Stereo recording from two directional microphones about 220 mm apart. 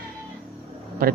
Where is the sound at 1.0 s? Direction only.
40° right (ahead or behind).